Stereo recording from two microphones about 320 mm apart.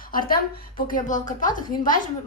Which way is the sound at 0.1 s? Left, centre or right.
Left.